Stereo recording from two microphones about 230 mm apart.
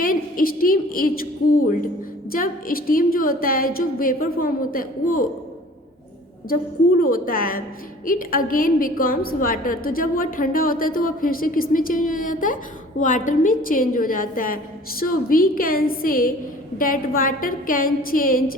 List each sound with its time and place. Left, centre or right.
0.0 s a woman's voice: left
2.3 s a woman's voice: left
7.0 s a woman's voice: left